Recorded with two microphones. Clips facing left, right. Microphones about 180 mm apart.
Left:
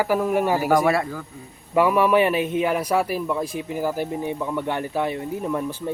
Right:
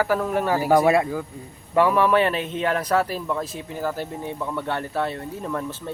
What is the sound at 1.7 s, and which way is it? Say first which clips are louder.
A man's voice: left 1 dB; 10° left (ahead or behind).